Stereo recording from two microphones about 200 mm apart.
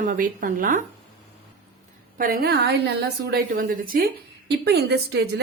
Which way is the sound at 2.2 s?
50° right (ahead or behind).